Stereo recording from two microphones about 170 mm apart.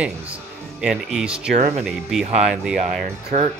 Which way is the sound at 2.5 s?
5° right (ahead or behind).